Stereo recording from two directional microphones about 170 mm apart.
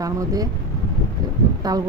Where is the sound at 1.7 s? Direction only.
25° right (ahead or behind).